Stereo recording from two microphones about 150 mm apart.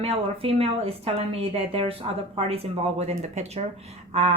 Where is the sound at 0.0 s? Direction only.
40° right (ahead or behind).